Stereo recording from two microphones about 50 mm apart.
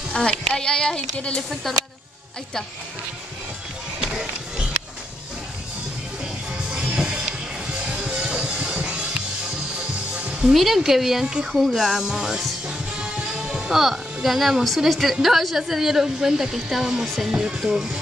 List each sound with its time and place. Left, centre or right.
0.1 s speech: centre
4.0 s music: centre
6.7 s music: centre
10.1 s music: centre
10.5 s a woman's voice: centre
13.0 s music: centre
13.6 s a woman's voice: centre